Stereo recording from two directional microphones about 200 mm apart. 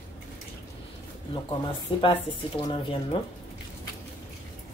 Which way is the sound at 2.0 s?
25° left (ahead or behind).